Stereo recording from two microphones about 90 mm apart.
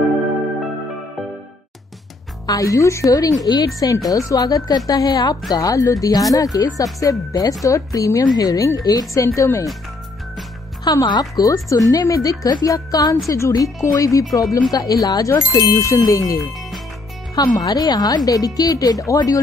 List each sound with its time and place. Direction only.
2.4 s a woman's voice: 40° left (ahead or behind)
10.8 s a woman's voice: 50° left (ahead or behind)
17.4 s a woman's voice: 45° left (ahead or behind)